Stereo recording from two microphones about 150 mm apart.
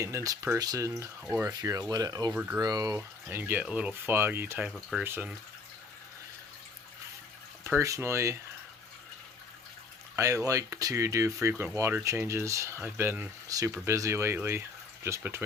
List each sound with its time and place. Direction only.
0.0 s speech: 20° right (ahead or behind)
1.2 s speech: centre (ahead or behind)
1.5 s speech: 25° right (ahead or behind)
2.3 s speech: 10° right (ahead or behind)
2.6 s speech: 25° right (ahead or behind)
4.7 s speech: centre (ahead or behind)
5.0 s speech: 15° right (ahead or behind)
7.6 s speech: 20° right (ahead or behind)
10.2 s speech: 20° right (ahead or behind)